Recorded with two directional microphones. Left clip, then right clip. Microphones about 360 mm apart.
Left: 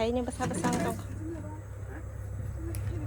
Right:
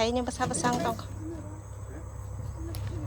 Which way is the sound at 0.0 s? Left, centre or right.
Centre.